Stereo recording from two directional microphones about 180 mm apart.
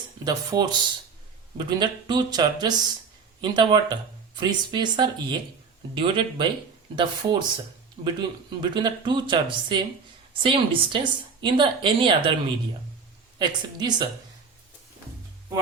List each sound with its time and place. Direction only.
0.3 s speech: 20° right (ahead or behind)
13.4 s speech: 25° right (ahead or behind)